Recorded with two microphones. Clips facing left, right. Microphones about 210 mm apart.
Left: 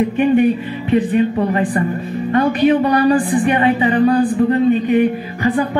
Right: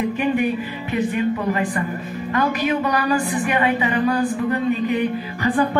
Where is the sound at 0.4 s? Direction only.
30° left (ahead or behind).